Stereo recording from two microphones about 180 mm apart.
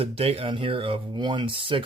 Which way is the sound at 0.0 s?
30° right (ahead or behind).